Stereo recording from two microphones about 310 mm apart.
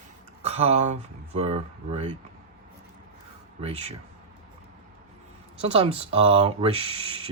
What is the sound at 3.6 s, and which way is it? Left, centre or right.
Speech, centre.